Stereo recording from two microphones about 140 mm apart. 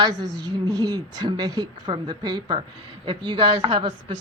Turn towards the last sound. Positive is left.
turn(degrees=-35)  # may be behind; listen again after turning